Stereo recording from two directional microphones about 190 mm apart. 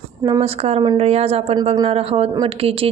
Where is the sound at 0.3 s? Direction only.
30° right (ahead or behind).